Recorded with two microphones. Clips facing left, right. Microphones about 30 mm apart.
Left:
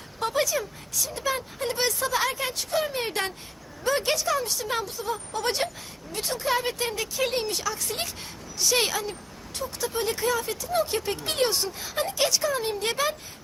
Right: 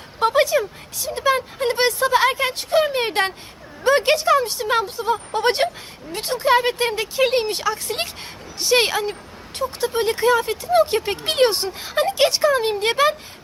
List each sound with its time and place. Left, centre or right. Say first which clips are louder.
0.2 s speech: right 9 dB; right